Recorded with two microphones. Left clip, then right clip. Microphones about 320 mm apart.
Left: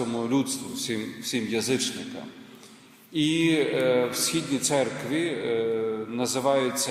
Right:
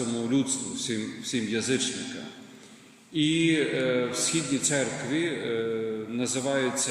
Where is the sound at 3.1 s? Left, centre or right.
Centre.